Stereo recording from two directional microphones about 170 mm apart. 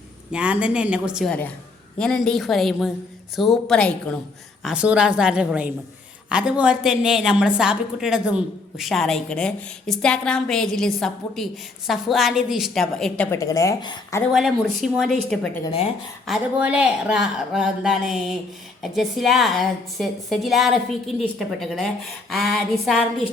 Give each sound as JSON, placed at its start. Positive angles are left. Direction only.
{"t": 0.3, "sound": "a woman's voice", "side_deg": -5}
{"t": 4.6, "sound": "a woman's voice", "side_deg": -5}
{"t": 13.3, "sound": "a woman's voice", "side_deg": 20}
{"t": 14.3, "sound": "a woman's voice", "side_deg": 0}